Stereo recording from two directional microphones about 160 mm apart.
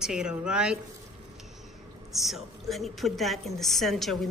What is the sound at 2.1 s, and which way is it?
Speech, centre (ahead or behind).